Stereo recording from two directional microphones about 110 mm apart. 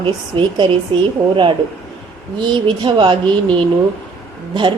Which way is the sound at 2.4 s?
45° right (ahead or behind).